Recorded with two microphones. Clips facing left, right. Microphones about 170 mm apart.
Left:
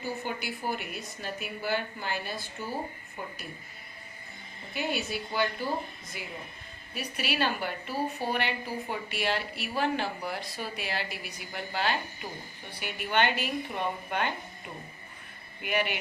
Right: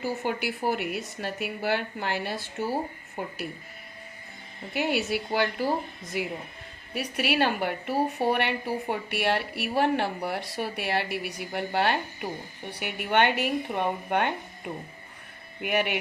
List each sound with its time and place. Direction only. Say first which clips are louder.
0.0 s a woman's voice: right 5 dB; 75° right (ahead or behind)
4.7 s a woman's voice: right 5 dB; 70° right (ahead or behind)
15.6 s a woman's voice: right 3 dB; 65° right (ahead or behind)